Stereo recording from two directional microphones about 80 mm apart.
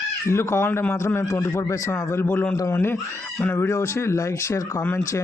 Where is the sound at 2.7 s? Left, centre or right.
Left.